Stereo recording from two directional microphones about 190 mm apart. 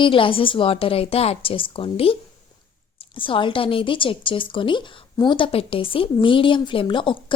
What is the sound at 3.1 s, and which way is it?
A woman's voice, 25° left (ahead or behind).